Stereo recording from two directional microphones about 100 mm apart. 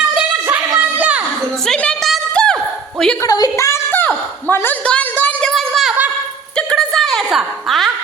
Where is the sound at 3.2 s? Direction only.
40° left (ahead or behind); by 5.5 s 15° left (ahead or behind).